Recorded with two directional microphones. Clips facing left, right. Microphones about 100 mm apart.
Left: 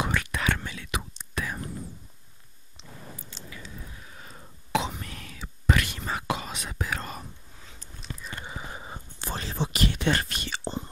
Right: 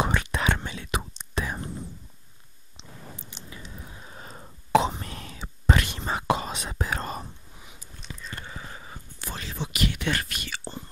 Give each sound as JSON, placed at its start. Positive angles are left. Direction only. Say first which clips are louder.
{"t": 0.0, "sound": "whispering", "louder": "right 2 dB", "side_deg": -25}
{"t": 2.8, "sound": "chewing", "louder": "even", "side_deg": -20}
{"t": 3.5, "sound": "whispering", "louder": "right 1 dB", "side_deg": -30}
{"t": 7.5, "sound": "a sound", "louder": "right 1 dB", "side_deg": -15}
{"t": 8.4, "sound": "whispering", "louder": "left 2 dB", "side_deg": 20}